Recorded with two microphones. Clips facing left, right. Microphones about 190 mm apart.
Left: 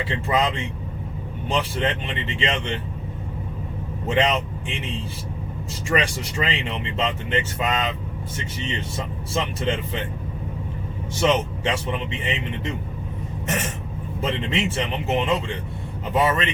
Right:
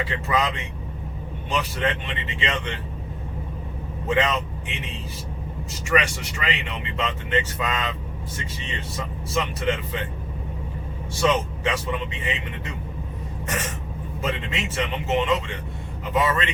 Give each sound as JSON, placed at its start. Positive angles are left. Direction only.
{"t": 0.0, "sound": "speech", "side_deg": 30}
{"t": 4.1, "sound": "speech", "side_deg": 25}
{"t": 5.9, "sound": "speech", "side_deg": 30}
{"t": 9.0, "sound": "speech", "side_deg": 25}
{"t": 11.2, "sound": "speech", "side_deg": 25}
{"t": 14.3, "sound": "speech", "side_deg": 30}